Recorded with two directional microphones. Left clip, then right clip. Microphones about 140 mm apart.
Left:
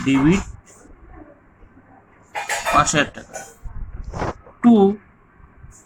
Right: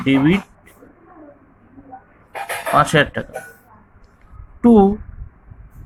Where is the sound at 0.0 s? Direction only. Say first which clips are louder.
Right 2 dB; 65° right (ahead or behind).